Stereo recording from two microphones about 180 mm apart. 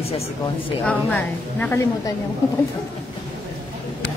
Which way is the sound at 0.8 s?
10° left (ahead or behind).